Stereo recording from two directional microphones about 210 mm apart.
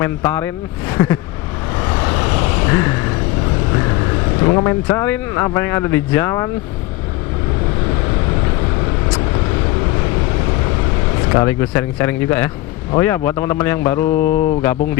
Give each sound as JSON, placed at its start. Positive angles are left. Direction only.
{"t": 0.0, "sound": "speech", "side_deg": 10}
{"t": 1.8, "sound": "vehicle", "side_deg": 15}
{"t": 3.7, "sound": "speech", "side_deg": 20}
{"t": 11.3, "sound": "speech", "side_deg": 10}
{"t": 14.1, "sound": "mantra", "side_deg": 45}